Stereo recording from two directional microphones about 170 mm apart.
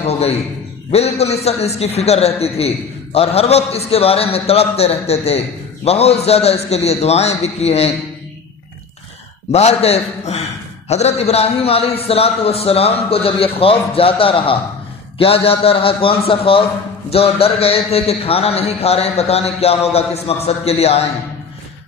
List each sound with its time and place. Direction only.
0.0 s a man's voice: 35° left (ahead or behind)
9.5 s a man's voice: 40° left (ahead or behind)